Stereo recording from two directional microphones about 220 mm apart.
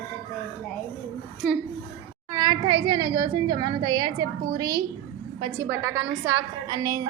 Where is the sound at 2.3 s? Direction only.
20° right (ahead or behind).